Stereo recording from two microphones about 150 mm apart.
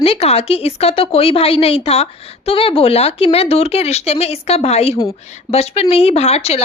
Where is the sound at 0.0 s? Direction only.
40° left (ahead or behind).